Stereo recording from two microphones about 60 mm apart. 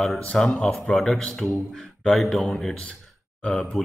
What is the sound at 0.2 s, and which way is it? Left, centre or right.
Speech, left.